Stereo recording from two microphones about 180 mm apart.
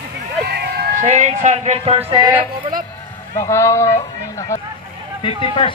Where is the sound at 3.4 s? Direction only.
15° left (ahead or behind).